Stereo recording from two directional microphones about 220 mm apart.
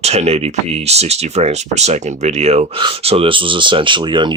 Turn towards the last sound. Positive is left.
turn(degrees=-20)  # may be behind; listen again after turning